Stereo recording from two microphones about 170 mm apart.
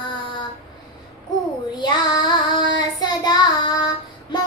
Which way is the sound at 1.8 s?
25° left (ahead or behind).